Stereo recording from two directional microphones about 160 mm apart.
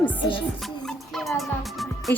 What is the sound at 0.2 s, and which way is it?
Music, 30° left (ahead or behind).